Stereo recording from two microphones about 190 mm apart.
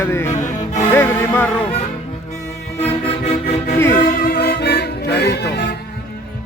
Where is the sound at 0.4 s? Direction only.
40° left (ahead or behind).